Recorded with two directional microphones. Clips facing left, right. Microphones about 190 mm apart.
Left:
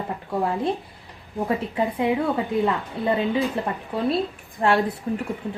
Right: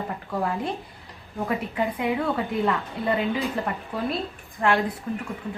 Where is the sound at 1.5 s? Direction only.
30° left (ahead or behind).